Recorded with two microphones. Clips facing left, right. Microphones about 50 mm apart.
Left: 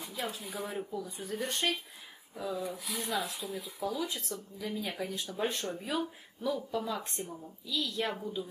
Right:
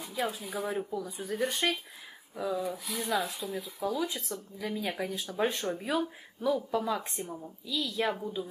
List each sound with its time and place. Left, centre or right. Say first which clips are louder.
0.0 s speech: right 5 dB; centre